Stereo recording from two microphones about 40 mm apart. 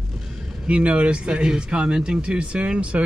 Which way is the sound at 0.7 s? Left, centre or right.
Right.